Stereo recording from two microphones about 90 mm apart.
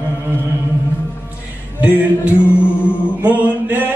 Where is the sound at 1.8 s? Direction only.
15° right (ahead or behind).